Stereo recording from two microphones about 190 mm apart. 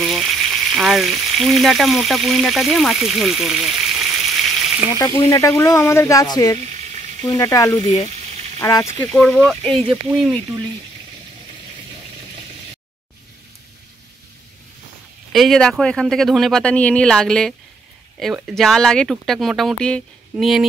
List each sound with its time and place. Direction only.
0.0 s frying: centre (ahead or behind)
4.9 s speech: 20° left (ahead or behind)
9.1 s speech: 5° left (ahead or behind)
15.3 s speech: centre (ahead or behind)